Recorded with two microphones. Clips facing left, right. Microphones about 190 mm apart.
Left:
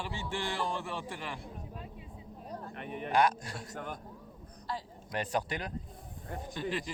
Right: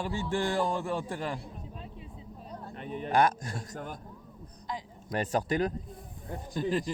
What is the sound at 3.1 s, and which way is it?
Speech, 50° right (ahead or behind).